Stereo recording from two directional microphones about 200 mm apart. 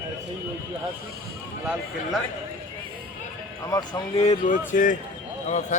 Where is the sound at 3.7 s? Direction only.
20° left (ahead or behind).